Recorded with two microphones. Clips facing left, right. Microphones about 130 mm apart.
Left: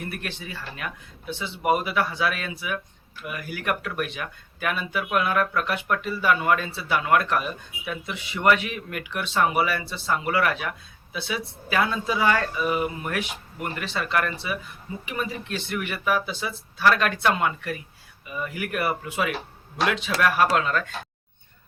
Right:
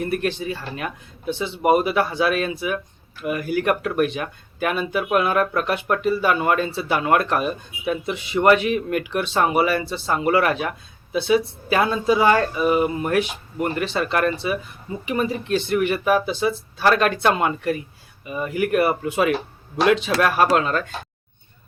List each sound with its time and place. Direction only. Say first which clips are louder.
0.0 s speech: right 11 dB; 30° right (ahead or behind)